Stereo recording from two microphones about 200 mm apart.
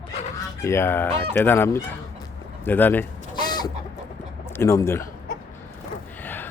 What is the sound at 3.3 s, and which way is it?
Chicken, 20° left (ahead or behind).